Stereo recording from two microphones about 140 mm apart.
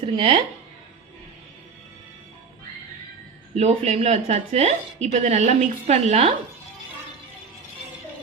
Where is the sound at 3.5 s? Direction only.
45° right (ahead or behind).